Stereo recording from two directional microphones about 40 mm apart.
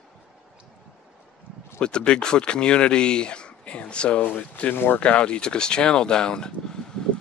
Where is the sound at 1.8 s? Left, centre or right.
Left.